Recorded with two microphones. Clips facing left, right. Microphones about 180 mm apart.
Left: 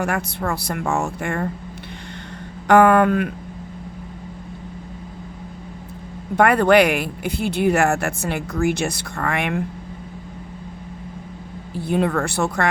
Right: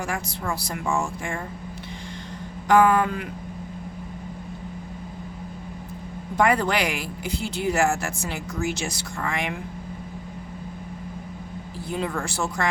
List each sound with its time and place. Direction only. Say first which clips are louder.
0.0 s speech: left 6 dB; 60° left (ahead or behind)
2.6 s speech: left 5 dB; 60° left (ahead or behind)
6.3 s speech: left 7 dB; 60° left (ahead or behind)
11.9 s speech: left 8 dB; 60° left (ahead or behind)